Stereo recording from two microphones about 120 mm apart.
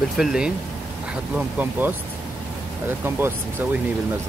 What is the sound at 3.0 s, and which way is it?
Speech, 20° right (ahead or behind).